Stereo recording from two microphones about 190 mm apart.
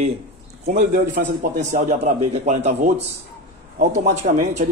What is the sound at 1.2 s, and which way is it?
A man's voice, 50° right (ahead or behind).